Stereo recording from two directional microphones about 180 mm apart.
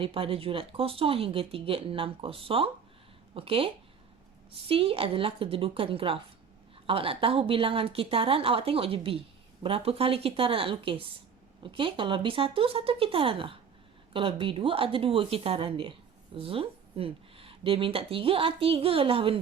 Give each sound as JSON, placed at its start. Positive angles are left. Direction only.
{"t": 0.0, "sound": "speech", "side_deg": -30}